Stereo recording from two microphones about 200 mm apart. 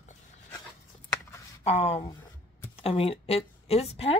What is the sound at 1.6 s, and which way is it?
Speech, 30° left (ahead or behind).